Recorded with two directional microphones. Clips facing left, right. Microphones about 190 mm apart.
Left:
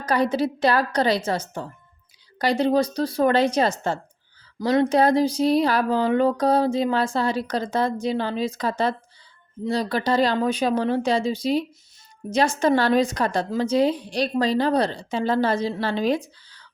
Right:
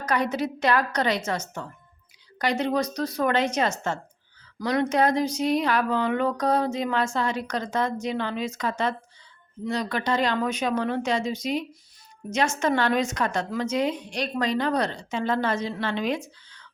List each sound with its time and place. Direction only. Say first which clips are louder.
0.0 s a woman's voice: left 4 dB; 30° left (ahead or behind)